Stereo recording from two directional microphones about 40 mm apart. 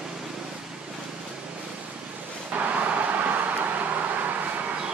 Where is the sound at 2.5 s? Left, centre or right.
Right.